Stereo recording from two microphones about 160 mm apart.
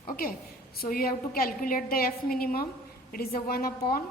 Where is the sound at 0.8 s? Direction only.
65° left (ahead or behind).